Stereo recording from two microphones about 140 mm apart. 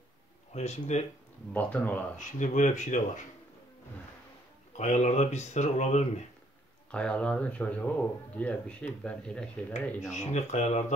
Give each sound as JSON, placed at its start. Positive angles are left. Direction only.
{"t": 0.5, "sound": "speech", "side_deg": 55}
{"t": 1.5, "sound": "speech", "side_deg": 10}
{"t": 2.1, "sound": "speech", "side_deg": 60}
{"t": 4.7, "sound": "speech", "side_deg": 55}
{"t": 6.9, "sound": "speech", "side_deg": 10}
{"t": 10.1, "sound": "speech", "side_deg": 55}